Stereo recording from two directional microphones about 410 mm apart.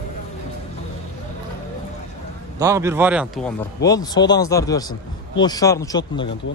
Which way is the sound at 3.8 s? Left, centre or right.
Centre.